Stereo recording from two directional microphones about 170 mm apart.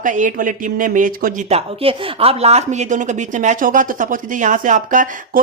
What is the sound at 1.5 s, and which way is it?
A woman's voice, 35° right (ahead or behind).